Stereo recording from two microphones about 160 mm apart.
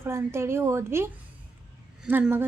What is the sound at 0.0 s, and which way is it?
A woman's voice, 15° right (ahead or behind).